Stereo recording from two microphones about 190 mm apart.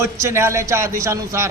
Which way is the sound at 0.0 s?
15° right (ahead or behind).